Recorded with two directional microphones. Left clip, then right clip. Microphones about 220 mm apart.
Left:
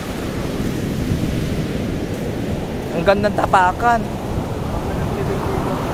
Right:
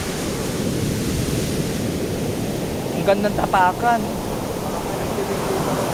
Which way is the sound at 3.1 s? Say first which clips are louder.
Left 3 dB; 40° left (ahead or behind).